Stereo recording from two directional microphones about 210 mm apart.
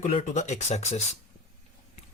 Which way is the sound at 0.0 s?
35° left (ahead or behind).